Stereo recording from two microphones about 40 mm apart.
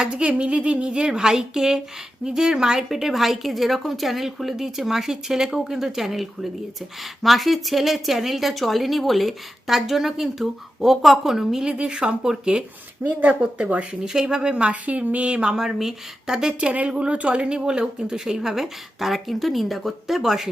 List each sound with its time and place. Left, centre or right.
0.0 s a woman's voice: right
13.0 s speech: right
14.0 s a woman's voice: centre
14.5 s a woman's voice: right
15.5 s a woman's voice: centre
16.6 s a woman's voice: right; by 20.5 s centre